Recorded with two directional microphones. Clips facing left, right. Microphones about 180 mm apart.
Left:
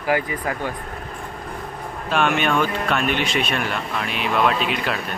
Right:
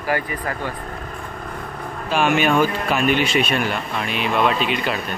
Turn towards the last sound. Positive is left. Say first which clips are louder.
# right 1 dB
turn(degrees=0)  # may be behind; listen again after turning